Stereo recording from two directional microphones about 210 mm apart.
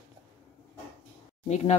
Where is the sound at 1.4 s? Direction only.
30° left (ahead or behind).